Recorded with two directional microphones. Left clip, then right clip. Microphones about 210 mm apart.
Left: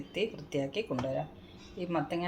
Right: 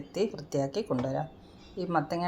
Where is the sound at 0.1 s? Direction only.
25° right (ahead or behind).